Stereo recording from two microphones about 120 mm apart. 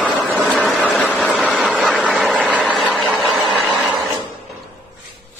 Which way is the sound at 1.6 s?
Centre (ahead or behind).